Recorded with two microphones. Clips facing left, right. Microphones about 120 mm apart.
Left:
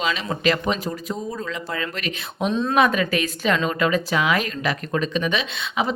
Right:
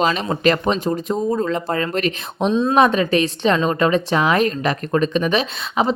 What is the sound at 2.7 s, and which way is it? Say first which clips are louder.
A woman's voice: right 4 dB; 35° right (ahead or behind).